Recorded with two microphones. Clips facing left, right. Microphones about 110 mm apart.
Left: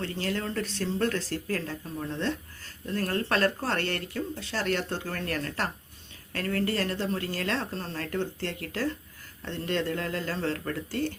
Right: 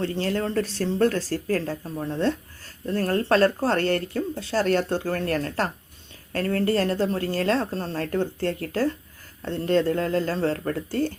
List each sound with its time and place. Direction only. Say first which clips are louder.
0.0 s speech: right 6 dB; 35° right (ahead or behind)